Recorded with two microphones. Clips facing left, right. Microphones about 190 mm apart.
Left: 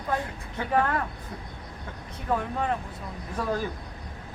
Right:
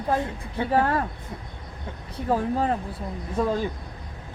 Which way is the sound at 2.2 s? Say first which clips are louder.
Right 4 dB; 35° right (ahead or behind).